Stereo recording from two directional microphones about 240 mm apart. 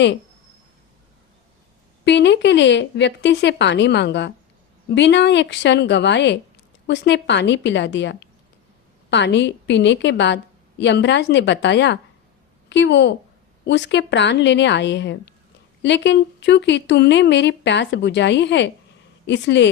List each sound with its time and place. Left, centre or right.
2.0 s a woman's voice: left